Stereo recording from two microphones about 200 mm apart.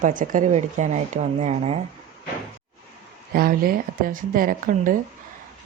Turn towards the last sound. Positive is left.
turn(degrees=-45)  # may be behind; listen again after turning